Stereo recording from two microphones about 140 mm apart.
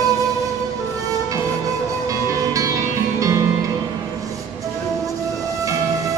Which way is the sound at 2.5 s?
25° right (ahead or behind).